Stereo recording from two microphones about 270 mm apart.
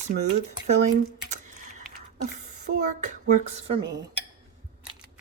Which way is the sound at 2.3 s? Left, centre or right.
Right.